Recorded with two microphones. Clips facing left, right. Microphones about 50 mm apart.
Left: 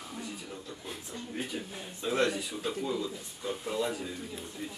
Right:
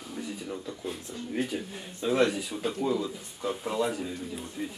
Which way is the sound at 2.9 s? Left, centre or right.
Centre.